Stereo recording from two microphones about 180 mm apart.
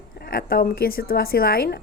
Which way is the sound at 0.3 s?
55° left (ahead or behind).